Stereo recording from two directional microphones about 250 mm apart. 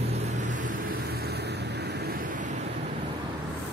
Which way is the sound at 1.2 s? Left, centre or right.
Right.